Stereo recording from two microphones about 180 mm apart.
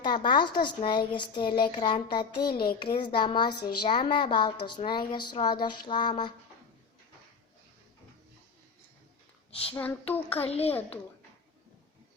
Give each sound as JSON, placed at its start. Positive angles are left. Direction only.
{"t": 0.0, "sound": "a woman's voice", "side_deg": 25}
{"t": 9.5, "sound": "speech", "side_deg": 30}
{"t": 9.7, "sound": "speech", "side_deg": 10}
{"t": 10.4, "sound": "a child's voice", "side_deg": 35}
{"t": 10.7, "sound": "speech", "side_deg": 10}